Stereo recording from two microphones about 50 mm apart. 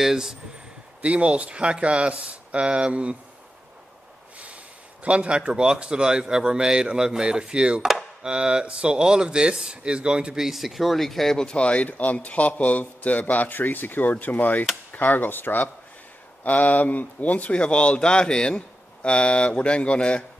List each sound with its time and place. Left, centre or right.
0.0 s speech: centre
1.0 s speech: right
5.0 s a man's voice: right
10.4 s speech: centre; by 20.2 s left